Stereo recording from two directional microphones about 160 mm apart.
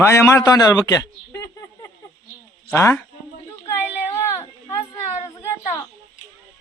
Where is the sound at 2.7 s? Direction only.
15° left (ahead or behind).